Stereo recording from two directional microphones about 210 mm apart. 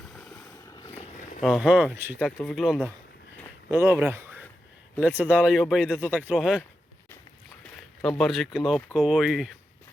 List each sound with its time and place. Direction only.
0.1 s boat: centre (ahead or behind)
0.3 s boat: 15° left (ahead or behind)
1.4 s speech: centre (ahead or behind)
3.7 s speech: 10° right (ahead or behind)
8.0 s speech: centre (ahead or behind)